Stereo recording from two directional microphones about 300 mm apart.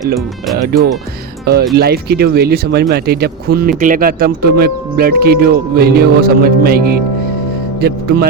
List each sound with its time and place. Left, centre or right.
0.5 s speech: right